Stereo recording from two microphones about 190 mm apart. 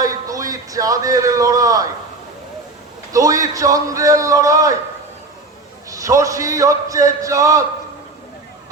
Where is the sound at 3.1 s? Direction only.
15° right (ahead or behind).